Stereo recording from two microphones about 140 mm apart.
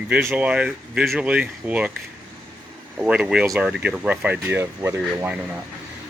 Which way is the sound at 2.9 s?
5° right (ahead or behind).